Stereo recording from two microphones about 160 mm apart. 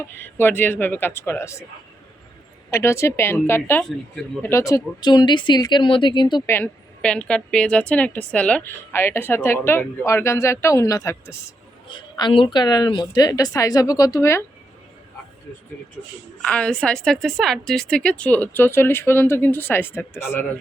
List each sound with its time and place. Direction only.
0.2 s a woman's voice: 15° left (ahead or behind)
2.6 s a woman's voice: 15° left (ahead or behind)
6.4 s a woman's voice: 15° left (ahead or behind)
11.9 s a woman's voice: 30° left (ahead or behind)
16.4 s a woman's voice: 5° left (ahead or behind)